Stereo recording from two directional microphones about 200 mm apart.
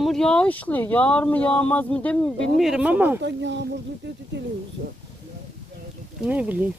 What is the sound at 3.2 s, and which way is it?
Speech, 60° right (ahead or behind).